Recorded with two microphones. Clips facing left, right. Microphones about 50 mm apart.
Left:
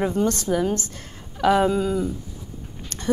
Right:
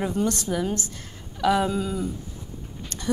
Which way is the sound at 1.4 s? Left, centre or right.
Left.